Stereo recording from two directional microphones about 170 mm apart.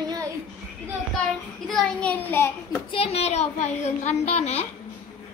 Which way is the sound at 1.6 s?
5° left (ahead or behind).